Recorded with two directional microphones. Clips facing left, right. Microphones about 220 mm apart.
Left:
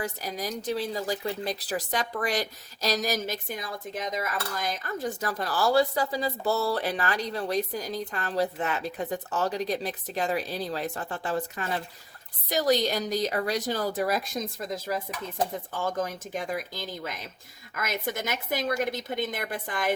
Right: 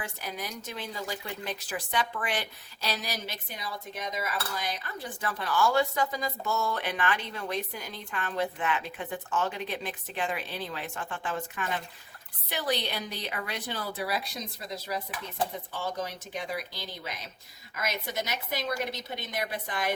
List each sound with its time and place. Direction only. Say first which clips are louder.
0.0 s a woman's voice: left 5 dB; 40° left (ahead or behind)